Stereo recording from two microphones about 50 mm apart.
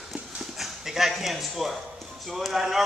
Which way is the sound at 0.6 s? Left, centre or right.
Centre.